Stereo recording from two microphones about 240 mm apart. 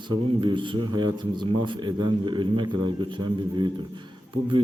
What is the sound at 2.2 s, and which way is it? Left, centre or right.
Speech, centre.